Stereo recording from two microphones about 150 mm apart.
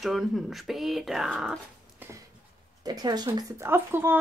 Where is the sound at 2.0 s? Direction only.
15° right (ahead or behind).